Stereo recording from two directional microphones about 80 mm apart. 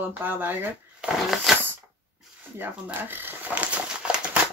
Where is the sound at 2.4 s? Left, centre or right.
Right.